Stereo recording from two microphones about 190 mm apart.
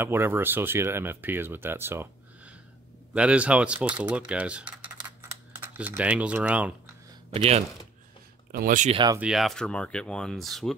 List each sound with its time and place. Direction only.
0.0 s speech: 10° right (ahead or behind)
7.3 s speech: 35° right (ahead or behind)
8.5 s speech: 50° right (ahead or behind)
8.9 s speech: 20° right (ahead or behind)
9.2 s speech: centre (ahead or behind)